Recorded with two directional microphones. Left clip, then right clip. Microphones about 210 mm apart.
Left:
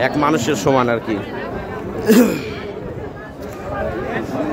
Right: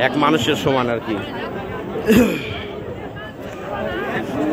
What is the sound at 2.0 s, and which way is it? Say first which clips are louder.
Speech: left 2 dB; 10° left (ahead or behind).